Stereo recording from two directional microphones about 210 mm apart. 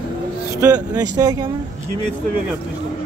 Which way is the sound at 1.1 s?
15° right (ahead or behind).